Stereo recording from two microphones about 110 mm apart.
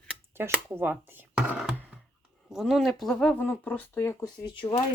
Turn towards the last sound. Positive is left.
turn(degrees=40)  # may be behind; listen again after turning